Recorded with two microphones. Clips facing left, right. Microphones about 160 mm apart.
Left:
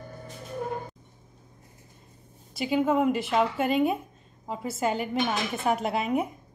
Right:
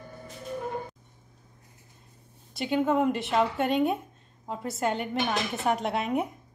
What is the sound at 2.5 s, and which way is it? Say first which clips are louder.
A woman's voice: left 1 dB; centre (ahead or behind).